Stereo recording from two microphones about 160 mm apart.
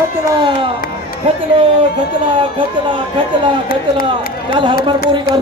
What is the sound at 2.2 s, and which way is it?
Speech, 30° right (ahead or behind).